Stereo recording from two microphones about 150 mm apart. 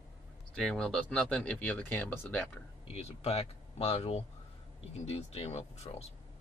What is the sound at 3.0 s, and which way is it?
Speech, 40° left (ahead or behind).